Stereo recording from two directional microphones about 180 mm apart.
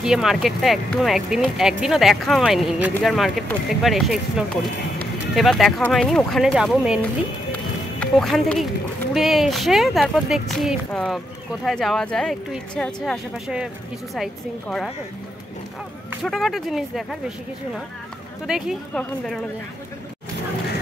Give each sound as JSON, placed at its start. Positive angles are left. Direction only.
{"t": 0.0, "sound": "speech", "side_deg": 0}
{"t": 8.0, "sound": "speech", "side_deg": 5}
{"t": 16.3, "sound": "speech", "side_deg": 0}
{"t": 18.5, "sound": "speech", "side_deg": 0}